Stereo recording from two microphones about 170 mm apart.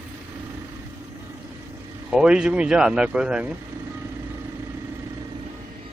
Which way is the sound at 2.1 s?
5° right (ahead or behind).